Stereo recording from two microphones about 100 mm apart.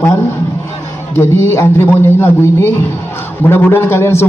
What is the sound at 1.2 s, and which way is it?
A man's voice, 25° left (ahead or behind).